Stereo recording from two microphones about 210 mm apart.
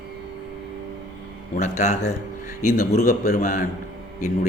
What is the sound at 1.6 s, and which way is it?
Speech, 35° left (ahead or behind).